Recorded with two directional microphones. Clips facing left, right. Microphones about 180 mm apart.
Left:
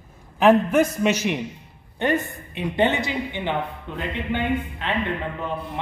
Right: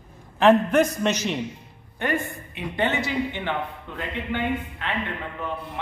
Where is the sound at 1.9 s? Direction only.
20° left (ahead or behind).